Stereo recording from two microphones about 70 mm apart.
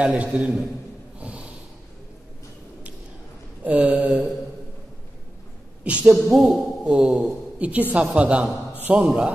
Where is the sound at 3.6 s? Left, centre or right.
Centre.